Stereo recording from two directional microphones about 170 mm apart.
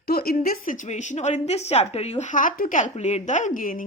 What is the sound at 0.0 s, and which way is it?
A woman's voice, 65° left (ahead or behind).